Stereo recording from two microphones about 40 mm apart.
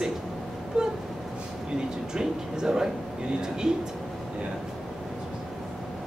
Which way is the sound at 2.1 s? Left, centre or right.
Centre.